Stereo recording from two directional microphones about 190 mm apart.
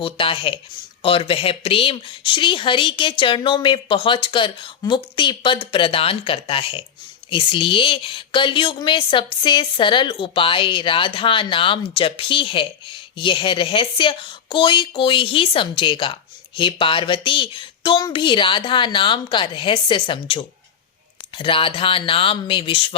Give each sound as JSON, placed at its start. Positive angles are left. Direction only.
{"t": 0.0, "sound": "a woman's voice", "side_deg": 30}